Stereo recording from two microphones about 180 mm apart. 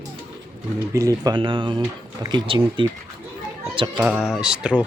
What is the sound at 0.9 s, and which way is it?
Speech, 20° right (ahead or behind).